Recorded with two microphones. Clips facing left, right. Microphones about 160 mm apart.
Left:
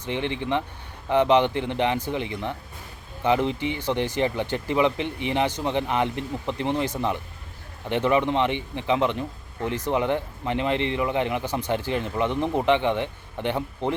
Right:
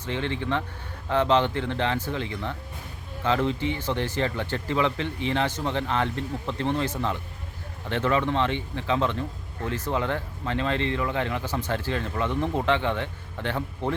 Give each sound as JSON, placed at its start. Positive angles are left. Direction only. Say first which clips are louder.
{"t": 0.0, "sound": "speech", "louder": "left 1 dB", "side_deg": 15}